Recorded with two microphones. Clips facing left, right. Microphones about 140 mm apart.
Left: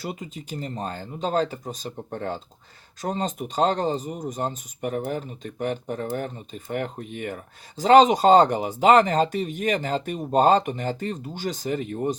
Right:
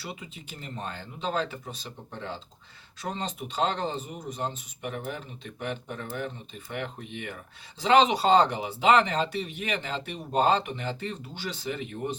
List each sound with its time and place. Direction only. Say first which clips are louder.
0.0 s speech: left 7 dB; 45° left (ahead or behind)